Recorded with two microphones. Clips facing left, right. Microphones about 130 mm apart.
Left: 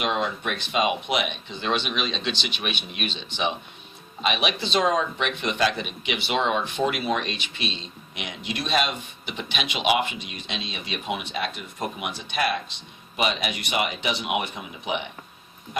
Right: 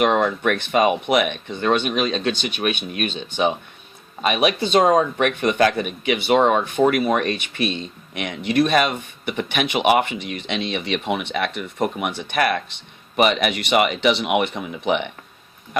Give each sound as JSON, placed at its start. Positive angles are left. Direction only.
{"t": 0.0, "sound": "speech", "side_deg": -55}